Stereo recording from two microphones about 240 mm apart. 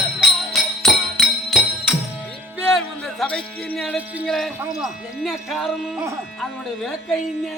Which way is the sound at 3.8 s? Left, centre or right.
Centre.